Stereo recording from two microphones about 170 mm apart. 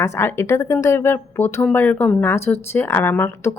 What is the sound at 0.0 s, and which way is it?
Speech, 15° left (ahead or behind).